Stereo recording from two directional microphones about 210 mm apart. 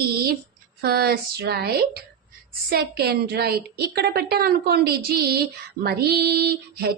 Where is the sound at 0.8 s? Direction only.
45° right (ahead or behind).